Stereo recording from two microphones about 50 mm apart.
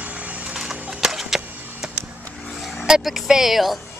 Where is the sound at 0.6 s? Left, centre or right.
Centre.